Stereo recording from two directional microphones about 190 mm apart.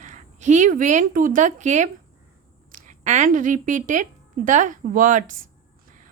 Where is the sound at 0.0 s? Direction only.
40° right (ahead or behind).